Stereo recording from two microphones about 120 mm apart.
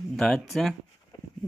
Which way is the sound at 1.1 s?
35° left (ahead or behind).